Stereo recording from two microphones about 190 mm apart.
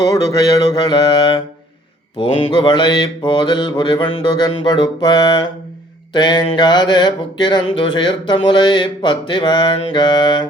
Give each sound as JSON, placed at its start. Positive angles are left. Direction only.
{"t": 0.0, "sound": "mantra", "side_deg": 20}